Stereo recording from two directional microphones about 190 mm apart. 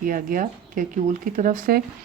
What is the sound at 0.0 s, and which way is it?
Speech, 45° right (ahead or behind).